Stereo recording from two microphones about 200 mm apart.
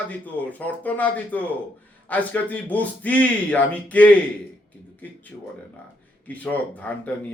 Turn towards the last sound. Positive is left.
turn(degrees=10)  # may be behind; listen again after turning